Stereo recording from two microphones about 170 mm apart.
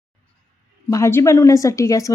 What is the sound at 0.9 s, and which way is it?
Speech, 15° left (ahead or behind).